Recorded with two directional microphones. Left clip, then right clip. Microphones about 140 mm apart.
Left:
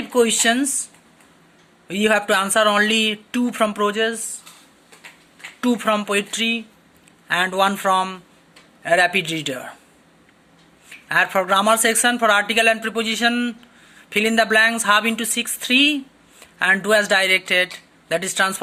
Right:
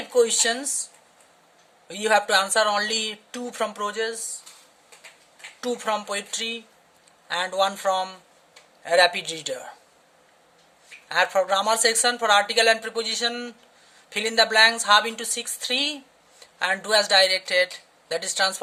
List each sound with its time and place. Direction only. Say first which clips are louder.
0.1 s speech: left 3 dB; 25° right (ahead or behind)
1.9 s speech: left 2 dB; 25° right (ahead or behind)
4.1 s speech: left 4 dB; centre (ahead or behind)
5.5 s speech: left 6 dB; 25° right (ahead or behind)
10.8 s speech: left 4 dB; 25° right (ahead or behind)